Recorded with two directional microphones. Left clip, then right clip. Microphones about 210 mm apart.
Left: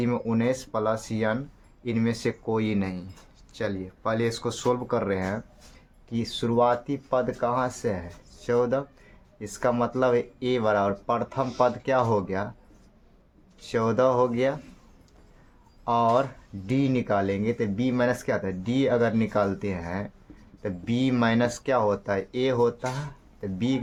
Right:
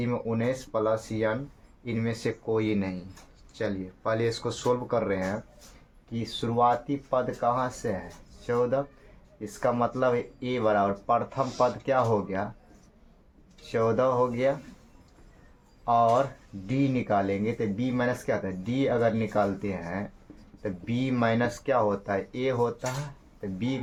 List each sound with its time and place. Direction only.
0.0 s speech: 40° left (ahead or behind)
13.7 s speech: 40° left (ahead or behind)
15.9 s speech: 40° left (ahead or behind)